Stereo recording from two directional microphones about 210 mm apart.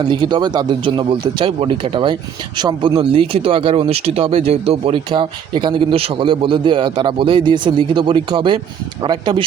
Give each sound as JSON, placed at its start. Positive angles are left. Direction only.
{"t": 0.1, "sound": "speech", "side_deg": -20}